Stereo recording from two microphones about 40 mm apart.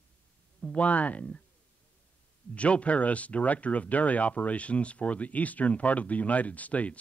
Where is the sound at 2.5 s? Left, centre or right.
Left.